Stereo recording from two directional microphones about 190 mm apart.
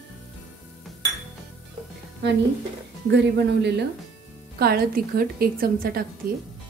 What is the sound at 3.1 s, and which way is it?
A woman's voice, 65° right (ahead or behind).